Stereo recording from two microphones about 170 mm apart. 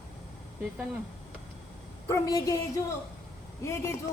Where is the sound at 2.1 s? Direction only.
20° left (ahead or behind).